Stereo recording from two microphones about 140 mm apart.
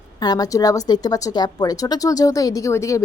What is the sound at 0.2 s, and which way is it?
A woman's voice, 25° left (ahead or behind).